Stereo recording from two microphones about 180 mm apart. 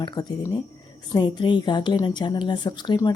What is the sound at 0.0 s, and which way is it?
Speech, 25° left (ahead or behind).